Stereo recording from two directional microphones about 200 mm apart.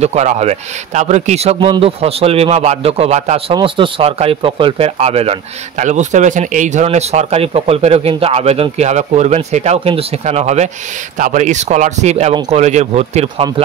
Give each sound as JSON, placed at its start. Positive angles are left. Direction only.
{"t": 0.0, "sound": "speech", "side_deg": -35}